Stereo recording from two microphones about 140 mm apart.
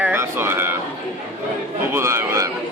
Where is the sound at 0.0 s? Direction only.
15° right (ahead or behind).